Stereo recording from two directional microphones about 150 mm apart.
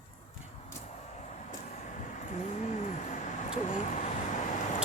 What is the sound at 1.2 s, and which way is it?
Vehicle, 50° left (ahead or behind).